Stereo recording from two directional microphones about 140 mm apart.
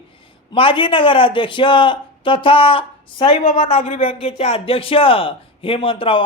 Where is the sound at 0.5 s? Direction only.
40° left (ahead or behind).